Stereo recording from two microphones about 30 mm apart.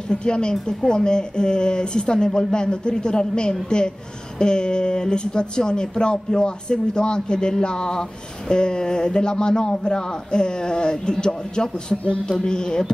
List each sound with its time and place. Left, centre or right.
0.1 s speech: left